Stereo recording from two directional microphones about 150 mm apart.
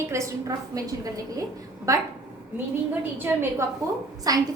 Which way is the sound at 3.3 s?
10° right (ahead or behind).